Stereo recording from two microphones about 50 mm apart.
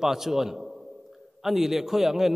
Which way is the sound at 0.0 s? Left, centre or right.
Centre.